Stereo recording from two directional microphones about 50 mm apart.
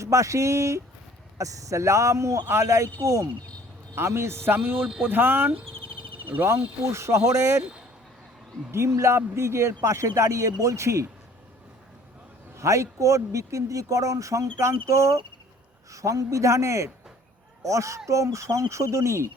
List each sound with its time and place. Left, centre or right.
0.0 s speech: right
2.5 s speech: right
3.9 s a man's voice: right
6.8 s speech: right
8.7 s speech: right
12.5 s speech: right